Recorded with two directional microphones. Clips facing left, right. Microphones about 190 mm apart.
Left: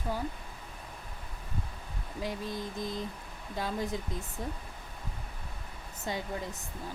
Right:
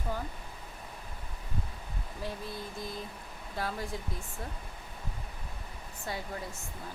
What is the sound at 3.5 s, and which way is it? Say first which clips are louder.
Speech: left 3 dB; 20° left (ahead or behind).